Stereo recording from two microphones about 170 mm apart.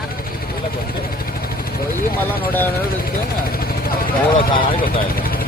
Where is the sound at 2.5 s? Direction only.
10° left (ahead or behind).